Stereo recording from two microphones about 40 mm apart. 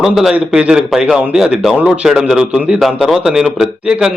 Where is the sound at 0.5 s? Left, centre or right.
Right.